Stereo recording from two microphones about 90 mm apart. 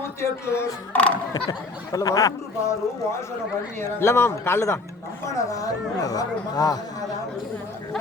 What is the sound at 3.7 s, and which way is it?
A man's voice, 30° left (ahead or behind).